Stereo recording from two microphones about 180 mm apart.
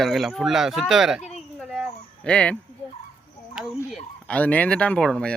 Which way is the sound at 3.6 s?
5° right (ahead or behind).